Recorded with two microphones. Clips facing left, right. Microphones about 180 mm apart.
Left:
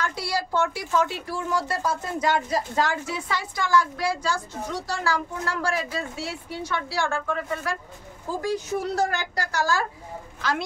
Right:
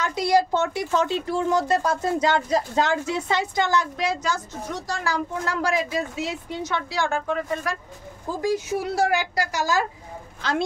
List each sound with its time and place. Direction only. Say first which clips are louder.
0.0 s speech: right 7 dB; 20° right (ahead or behind)